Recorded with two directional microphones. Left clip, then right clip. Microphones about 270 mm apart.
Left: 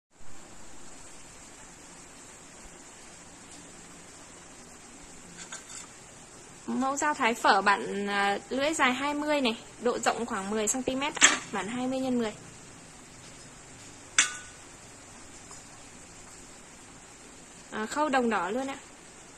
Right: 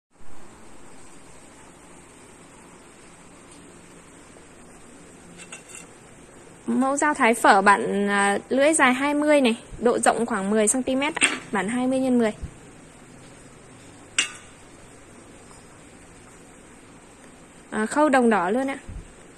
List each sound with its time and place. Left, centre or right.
6.7 s a woman's voice: centre
17.6 s a woman's voice: right